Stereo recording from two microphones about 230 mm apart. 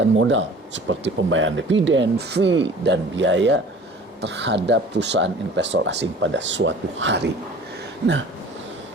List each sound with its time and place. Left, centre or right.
0.0 s speech: right